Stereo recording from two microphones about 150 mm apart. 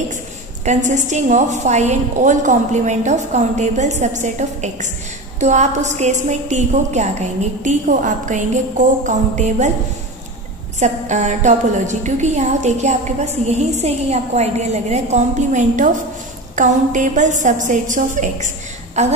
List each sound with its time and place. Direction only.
0.7 s a woman's voice: 55° right (ahead or behind)
10.8 s a woman's voice: 55° right (ahead or behind)